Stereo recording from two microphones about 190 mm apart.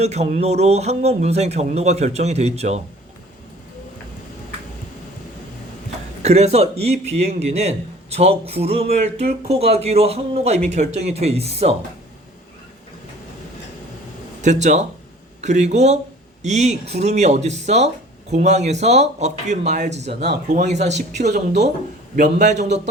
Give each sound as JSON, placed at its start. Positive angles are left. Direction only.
{"t": 0.0, "sound": "a man's voice", "side_deg": -35}
{"t": 6.2, "sound": "a man's voice", "side_deg": -35}
{"t": 14.4, "sound": "a man's voice", "side_deg": -40}